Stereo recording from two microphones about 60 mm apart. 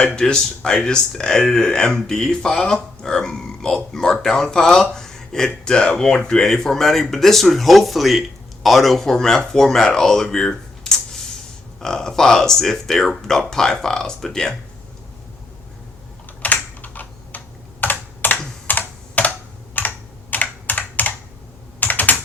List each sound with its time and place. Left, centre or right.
0.2 s speech: centre
10.3 s a sound: centre
11.8 s speech: centre
16.4 s computer keyboard: left